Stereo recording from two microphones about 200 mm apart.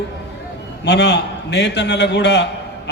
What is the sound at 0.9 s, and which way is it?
A man's voice, 55° left (ahead or behind).